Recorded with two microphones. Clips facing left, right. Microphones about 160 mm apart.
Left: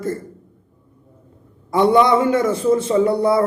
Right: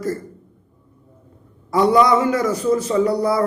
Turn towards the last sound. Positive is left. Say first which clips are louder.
# left 2 dB
turn(degrees=25)  # may be behind; listen again after turning